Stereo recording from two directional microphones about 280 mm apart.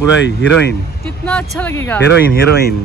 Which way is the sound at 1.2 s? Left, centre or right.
Centre.